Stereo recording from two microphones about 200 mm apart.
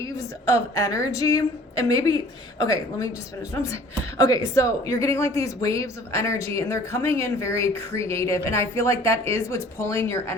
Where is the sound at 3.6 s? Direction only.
15° left (ahead or behind).